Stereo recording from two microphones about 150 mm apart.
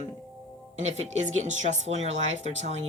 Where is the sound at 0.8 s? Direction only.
50° right (ahead or behind).